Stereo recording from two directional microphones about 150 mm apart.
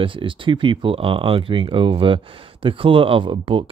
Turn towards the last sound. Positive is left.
turn(degrees=-35)  # may be behind; listen again after turning